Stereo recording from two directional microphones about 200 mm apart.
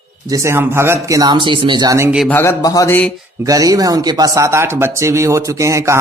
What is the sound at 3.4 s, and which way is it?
Speech, 15° right (ahead or behind).